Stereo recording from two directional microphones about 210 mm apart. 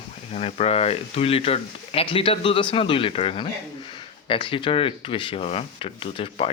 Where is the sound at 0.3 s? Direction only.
30° left (ahead or behind).